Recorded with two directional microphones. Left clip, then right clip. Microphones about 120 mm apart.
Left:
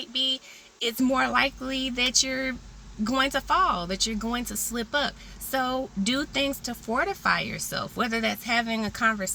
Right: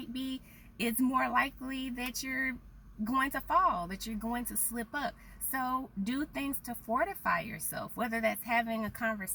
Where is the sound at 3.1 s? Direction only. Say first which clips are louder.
Left 6 dB; 15° left (ahead or behind).